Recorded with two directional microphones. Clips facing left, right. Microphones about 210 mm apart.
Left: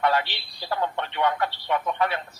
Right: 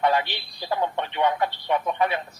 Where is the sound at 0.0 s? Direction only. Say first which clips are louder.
Right 1 dB; 15° right (ahead or behind).